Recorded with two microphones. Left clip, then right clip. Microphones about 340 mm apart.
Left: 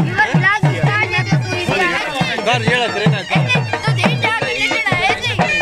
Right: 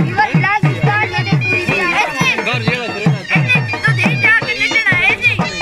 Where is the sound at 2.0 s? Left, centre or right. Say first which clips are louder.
Right 5 dB; centre.